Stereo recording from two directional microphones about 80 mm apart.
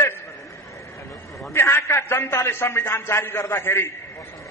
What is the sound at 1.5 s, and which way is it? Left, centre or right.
A man's voice, left.